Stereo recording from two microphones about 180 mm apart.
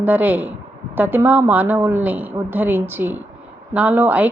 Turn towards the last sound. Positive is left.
turn(degrees=-10)  # may be behind; listen again after turning